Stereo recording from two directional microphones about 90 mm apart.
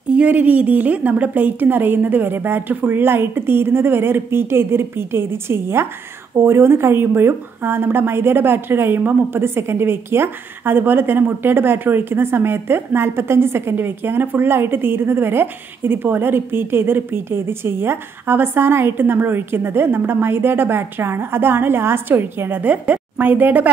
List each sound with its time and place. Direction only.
0.1 s a woman's voice: 15° right (ahead or behind)